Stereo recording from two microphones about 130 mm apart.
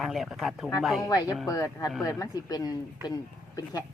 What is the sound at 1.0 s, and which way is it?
Speech, 30° left (ahead or behind).